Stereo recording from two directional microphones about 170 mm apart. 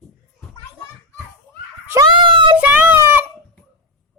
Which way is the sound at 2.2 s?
30° right (ahead or behind).